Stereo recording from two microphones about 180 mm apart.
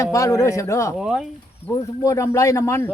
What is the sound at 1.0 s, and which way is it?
Speech, 5° right (ahead or behind).